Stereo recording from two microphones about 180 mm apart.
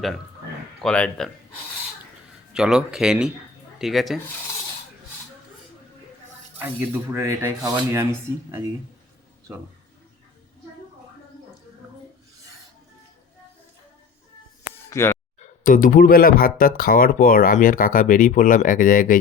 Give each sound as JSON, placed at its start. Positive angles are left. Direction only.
{"t": 0.8, "sound": "speech", "side_deg": 5}
{"t": 2.5, "sound": "speech", "side_deg": -5}
{"t": 6.6, "sound": "rub", "side_deg": -10}
{"t": 14.8, "sound": "chicken", "side_deg": 15}
{"t": 15.4, "sound": "speech", "side_deg": 50}